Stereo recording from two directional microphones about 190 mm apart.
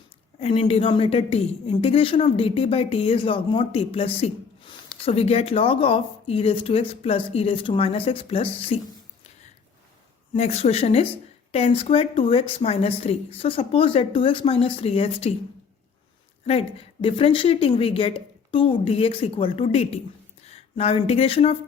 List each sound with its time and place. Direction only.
0.3 s a woman's voice: 30° left (ahead or behind)
10.3 s a woman's voice: 35° left (ahead or behind)
16.5 s speech: 30° left (ahead or behind)